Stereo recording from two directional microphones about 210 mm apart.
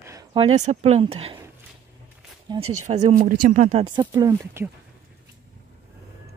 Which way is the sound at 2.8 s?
30° right (ahead or behind).